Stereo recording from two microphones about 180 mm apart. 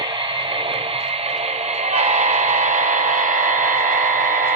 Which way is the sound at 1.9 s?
35° right (ahead or behind).